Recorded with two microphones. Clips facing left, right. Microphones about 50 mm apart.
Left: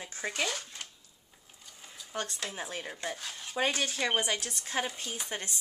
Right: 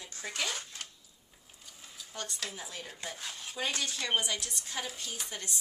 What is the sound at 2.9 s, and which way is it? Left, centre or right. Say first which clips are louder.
Speech: left 5 dB; centre.